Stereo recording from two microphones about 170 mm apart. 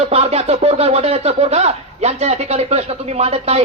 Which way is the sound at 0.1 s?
35° right (ahead or behind).